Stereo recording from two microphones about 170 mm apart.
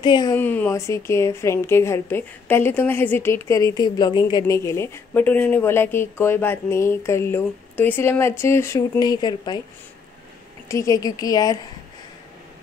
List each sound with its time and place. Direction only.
0.0 s a woman's voice: 25° left (ahead or behind)
0.4 s a woman's voice: 10° left (ahead or behind)
10.7 s a woman's voice: 20° left (ahead or behind)